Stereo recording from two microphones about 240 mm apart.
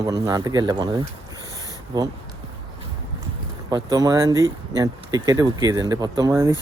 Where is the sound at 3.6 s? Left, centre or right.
Centre.